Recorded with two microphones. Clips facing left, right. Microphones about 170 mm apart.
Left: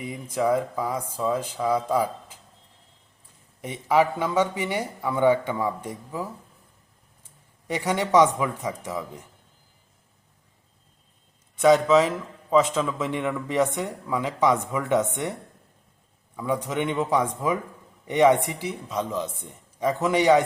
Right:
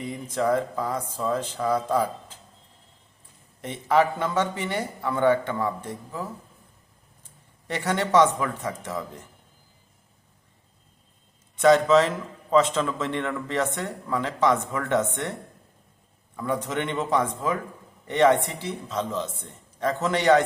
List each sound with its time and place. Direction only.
0.0 s a man's voice: 10° left (ahead or behind)
3.6 s a man's voice: 10° left (ahead or behind)
7.7 s a man's voice: 10° left (ahead or behind)
11.5 s a man's voice: 10° left (ahead or behind)